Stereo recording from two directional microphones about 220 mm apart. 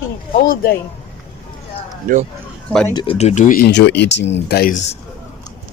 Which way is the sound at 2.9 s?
20° left (ahead or behind).